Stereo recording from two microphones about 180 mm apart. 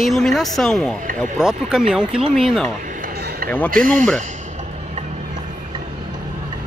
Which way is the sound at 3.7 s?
50° right (ahead or behind).